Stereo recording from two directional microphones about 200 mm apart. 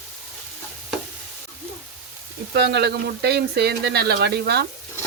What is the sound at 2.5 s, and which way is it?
Speech, 55° right (ahead or behind).